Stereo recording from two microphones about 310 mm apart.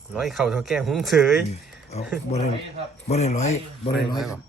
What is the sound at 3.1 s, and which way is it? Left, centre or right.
Speech, left.